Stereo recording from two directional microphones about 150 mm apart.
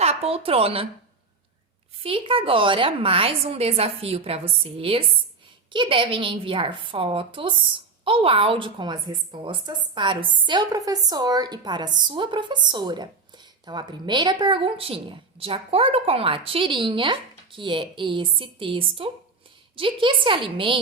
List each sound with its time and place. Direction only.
0.0 s a woman's voice: 45° right (ahead or behind)
2.0 s a woman's voice: 35° right (ahead or behind)